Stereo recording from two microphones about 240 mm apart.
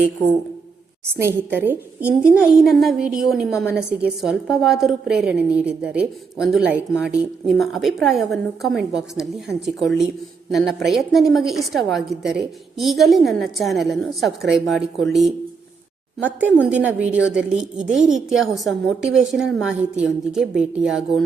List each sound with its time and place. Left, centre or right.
1.0 s a woman's voice: centre
16.4 s a woman's voice: centre
17.7 s a woman's voice: right
18.3 s a woman's voice: centre